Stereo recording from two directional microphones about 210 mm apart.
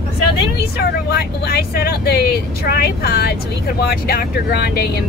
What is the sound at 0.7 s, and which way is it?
Speech, 50° left (ahead or behind).